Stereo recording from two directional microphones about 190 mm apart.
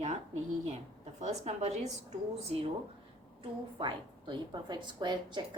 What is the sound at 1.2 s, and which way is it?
Speech, 35° right (ahead or behind).